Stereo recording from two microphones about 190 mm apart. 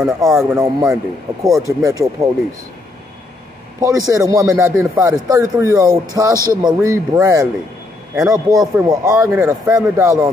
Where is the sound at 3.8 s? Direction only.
15° right (ahead or behind).